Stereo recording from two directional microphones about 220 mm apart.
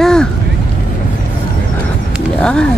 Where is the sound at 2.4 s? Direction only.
5° left (ahead or behind).